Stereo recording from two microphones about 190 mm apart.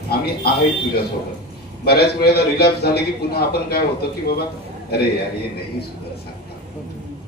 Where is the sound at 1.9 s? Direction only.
55° left (ahead or behind).